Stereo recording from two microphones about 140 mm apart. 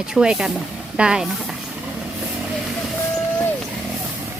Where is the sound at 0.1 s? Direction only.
5° right (ahead or behind).